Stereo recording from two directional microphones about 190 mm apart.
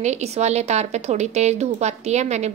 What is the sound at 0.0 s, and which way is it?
A woman's voice, 35° right (ahead or behind).